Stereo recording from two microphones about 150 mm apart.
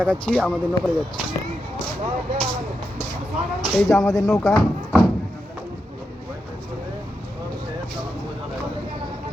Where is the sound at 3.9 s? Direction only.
20° left (ahead or behind).